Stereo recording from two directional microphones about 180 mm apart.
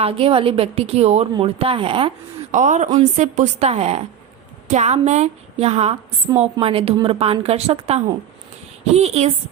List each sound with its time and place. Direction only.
0.0 s a woman's voice: 30° right (ahead or behind)
2.5 s a woman's voice: 45° right (ahead or behind)